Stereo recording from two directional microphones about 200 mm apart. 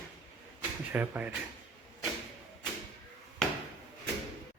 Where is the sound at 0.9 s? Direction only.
10° right (ahead or behind).